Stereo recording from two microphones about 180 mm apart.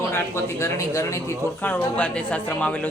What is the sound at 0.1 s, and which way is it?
Speech, 15° left (ahead or behind).